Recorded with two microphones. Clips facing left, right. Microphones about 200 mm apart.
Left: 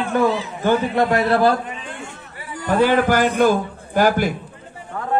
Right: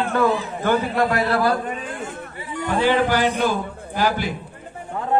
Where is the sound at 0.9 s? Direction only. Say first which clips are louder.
Left 3 dB; 25° left (ahead or behind).